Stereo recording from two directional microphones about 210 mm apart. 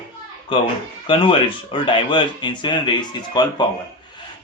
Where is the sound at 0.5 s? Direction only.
25° left (ahead or behind).